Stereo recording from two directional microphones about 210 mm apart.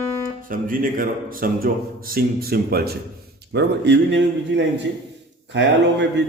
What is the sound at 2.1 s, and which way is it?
Mantra, 45° right (ahead or behind).